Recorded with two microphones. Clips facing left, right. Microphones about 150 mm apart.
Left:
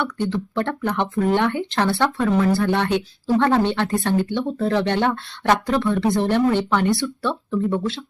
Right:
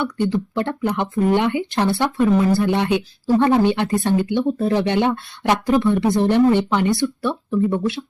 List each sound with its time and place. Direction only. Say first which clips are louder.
0.3 s speech: right 2 dB; 15° right (ahead or behind)